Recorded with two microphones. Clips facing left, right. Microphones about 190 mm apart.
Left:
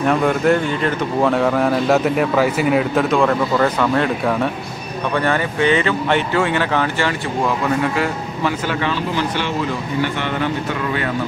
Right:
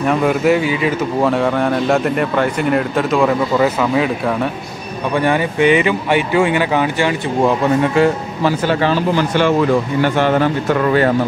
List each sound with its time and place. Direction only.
0.0 s speech: centre (ahead or behind)
5.1 s speech: 15° right (ahead or behind)
8.0 s speech: 35° right (ahead or behind)
10.0 s a man's voice: 40° right (ahead or behind)